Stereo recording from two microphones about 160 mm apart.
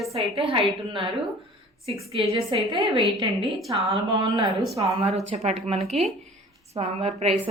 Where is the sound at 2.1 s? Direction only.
35° right (ahead or behind).